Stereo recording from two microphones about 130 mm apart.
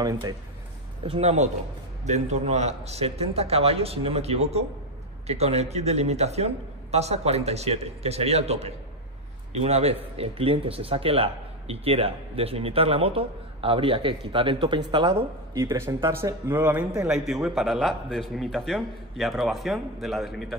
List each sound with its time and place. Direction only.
0.0 s speech: 30° right (ahead or behind)
1.0 s a man's voice: 45° right (ahead or behind)
2.0 s a man's voice: 60° right (ahead or behind); by 15.2 s 40° right (ahead or behind)
15.5 s speech: 25° right (ahead or behind)
17.0 s a man's voice: 5° right (ahead or behind)